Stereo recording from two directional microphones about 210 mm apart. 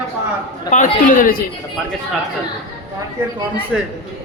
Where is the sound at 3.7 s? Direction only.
Centre (ahead or behind).